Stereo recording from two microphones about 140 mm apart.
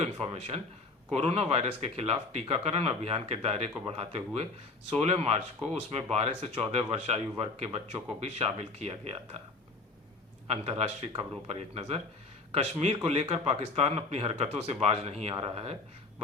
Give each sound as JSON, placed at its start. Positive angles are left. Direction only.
{"t": 0.0, "sound": "speech", "side_deg": -45}
{"t": 10.5, "sound": "speech", "side_deg": -50}
{"t": 13.1, "sound": "speech", "side_deg": -40}